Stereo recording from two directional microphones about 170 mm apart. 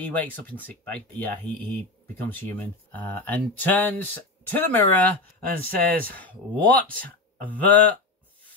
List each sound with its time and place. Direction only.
0.0 s speech: 10° left (ahead or behind)
5.5 s speech: 55° right (ahead or behind)
6.1 s speech: 10° left (ahead or behind)